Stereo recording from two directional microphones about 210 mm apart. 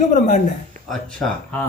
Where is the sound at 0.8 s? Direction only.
40° right (ahead or behind).